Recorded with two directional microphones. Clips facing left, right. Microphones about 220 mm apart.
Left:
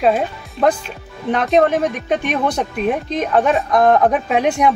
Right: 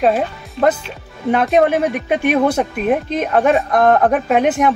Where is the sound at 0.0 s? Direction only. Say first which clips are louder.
Right 1 dB; 5° right (ahead or behind).